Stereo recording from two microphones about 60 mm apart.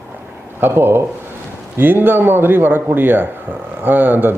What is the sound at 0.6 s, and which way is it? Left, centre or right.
Speech, right.